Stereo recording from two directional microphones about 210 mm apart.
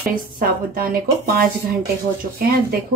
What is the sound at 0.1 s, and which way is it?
A woman's voice, 40° right (ahead or behind).